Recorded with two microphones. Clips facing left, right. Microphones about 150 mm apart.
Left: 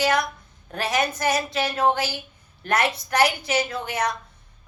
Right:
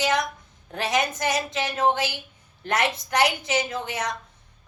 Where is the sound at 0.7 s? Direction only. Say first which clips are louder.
Left 1 dB; 20° right (ahead or behind).